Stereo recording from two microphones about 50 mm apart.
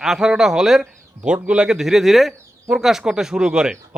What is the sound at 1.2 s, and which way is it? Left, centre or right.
Speech, centre.